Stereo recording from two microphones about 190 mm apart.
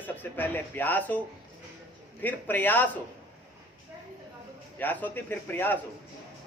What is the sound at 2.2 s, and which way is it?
Speech, 10° left (ahead or behind).